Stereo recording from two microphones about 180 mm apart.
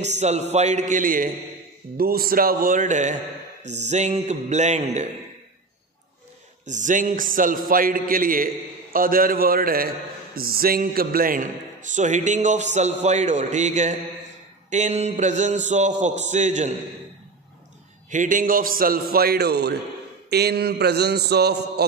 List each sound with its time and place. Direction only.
0.0 s a man's voice: 40° right (ahead or behind)
6.7 s a man's voice: 45° right (ahead or behind)
18.1 s a man's voice: 45° right (ahead or behind); by 19.7 s 65° right (ahead or behind)
20.2 s mantra: 65° right (ahead or behind)